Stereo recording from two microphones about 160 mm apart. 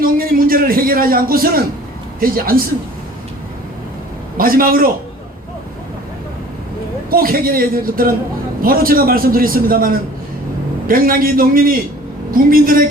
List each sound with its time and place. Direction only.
0.0 s a man's voice: 65° right (ahead or behind)
4.4 s a man's voice: 65° right (ahead or behind)
7.1 s a man's voice: 65° right (ahead or behind)